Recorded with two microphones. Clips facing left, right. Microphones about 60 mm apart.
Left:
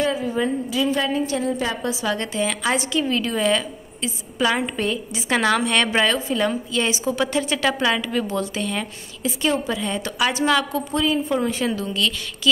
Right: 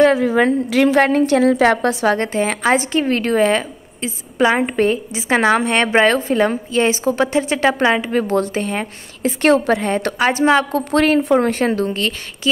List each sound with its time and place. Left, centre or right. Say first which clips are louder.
0.0 s a woman's voice: right 9 dB; right
2.1 s a woman's voice: right 5 dB; right
9.4 s a woman's voice: right 9 dB; right
10.9 s a woman's voice: right 9 dB; right